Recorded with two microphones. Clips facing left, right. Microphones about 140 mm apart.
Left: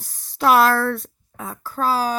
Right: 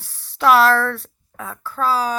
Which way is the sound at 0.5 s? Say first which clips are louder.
Right 1 dB; 10° left (ahead or behind).